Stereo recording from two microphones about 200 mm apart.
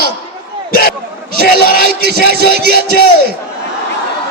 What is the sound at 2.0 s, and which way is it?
Music, 55° right (ahead or behind).